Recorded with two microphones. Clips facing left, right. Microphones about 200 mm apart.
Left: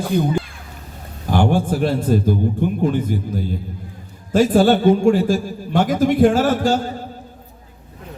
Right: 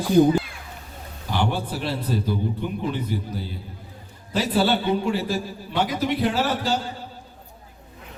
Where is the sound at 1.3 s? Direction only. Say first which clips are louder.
Left 8 dB; 50° left (ahead or behind).